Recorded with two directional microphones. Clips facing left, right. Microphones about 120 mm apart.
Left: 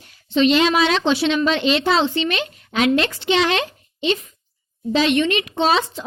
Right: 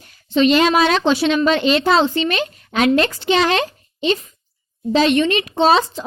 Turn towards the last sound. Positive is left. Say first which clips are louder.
# right 4 dB
turn(degrees=-35)  # may be behind; listen again after turning